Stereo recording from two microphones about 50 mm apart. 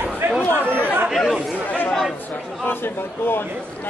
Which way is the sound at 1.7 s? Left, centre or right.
Left.